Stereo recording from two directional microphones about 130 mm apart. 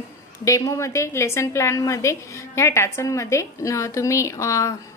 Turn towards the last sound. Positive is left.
turn(degrees=25)  # may be behind; listen again after turning